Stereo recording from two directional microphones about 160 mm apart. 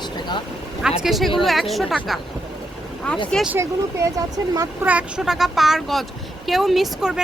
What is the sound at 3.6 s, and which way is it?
Speech, 20° right (ahead or behind).